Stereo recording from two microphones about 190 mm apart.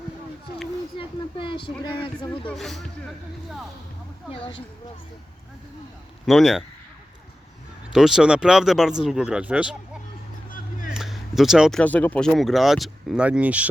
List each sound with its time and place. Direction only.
0.9 s a sound: 25° left (ahead or behind)
2.5 s speech: centre (ahead or behind)
4.3 s speech: 25° left (ahead or behind)
6.2 s speech: centre (ahead or behind)
7.9 s speech: centre (ahead or behind)
10.5 s music: 45° left (ahead or behind)
10.9 s speech: centre (ahead or behind)